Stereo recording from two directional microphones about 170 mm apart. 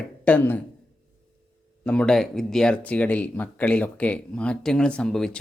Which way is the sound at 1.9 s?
5° left (ahead or behind).